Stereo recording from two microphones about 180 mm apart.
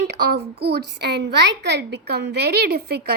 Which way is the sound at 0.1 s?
65° right (ahead or behind).